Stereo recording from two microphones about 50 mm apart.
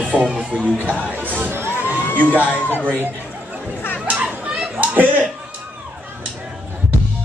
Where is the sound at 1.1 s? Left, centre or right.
Right.